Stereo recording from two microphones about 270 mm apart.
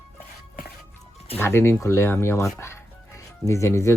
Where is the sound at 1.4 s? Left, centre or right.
Centre.